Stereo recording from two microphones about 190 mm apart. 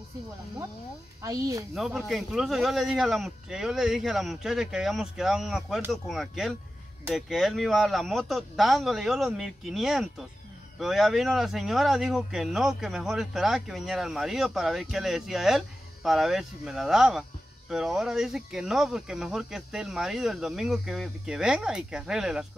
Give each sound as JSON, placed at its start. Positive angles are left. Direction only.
{"t": 1.2, "sound": "speech", "side_deg": -15}
{"t": 1.8, "sound": "speech", "side_deg": -5}